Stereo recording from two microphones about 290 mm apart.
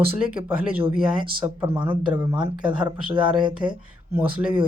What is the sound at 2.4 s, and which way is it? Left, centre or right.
Speech, centre.